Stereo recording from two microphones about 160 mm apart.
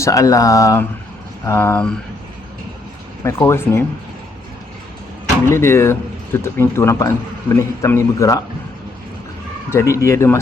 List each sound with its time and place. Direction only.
0.0 s speech: 20° left (ahead or behind)
3.2 s speech: 15° left (ahead or behind)
5.5 s speech: 15° left (ahead or behind)
9.6 s speech: 15° left (ahead or behind)